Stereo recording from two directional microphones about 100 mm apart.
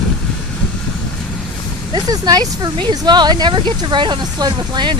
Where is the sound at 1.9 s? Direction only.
40° right (ahead or behind).